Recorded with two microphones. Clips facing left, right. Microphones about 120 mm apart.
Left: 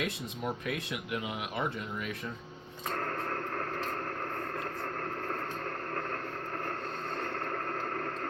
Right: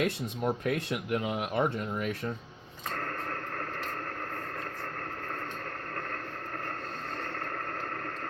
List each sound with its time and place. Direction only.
0.0 s speech: 45° right (ahead or behind)